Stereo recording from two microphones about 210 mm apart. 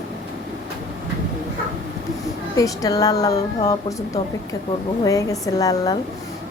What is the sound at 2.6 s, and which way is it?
Speech, 15° left (ahead or behind).